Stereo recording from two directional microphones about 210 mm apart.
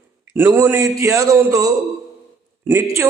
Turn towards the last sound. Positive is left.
turn(degrees=-10)  # may be behind; listen again after turning